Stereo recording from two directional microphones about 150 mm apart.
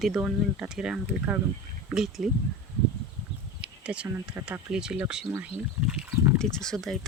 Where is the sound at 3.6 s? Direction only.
5° right (ahead or behind).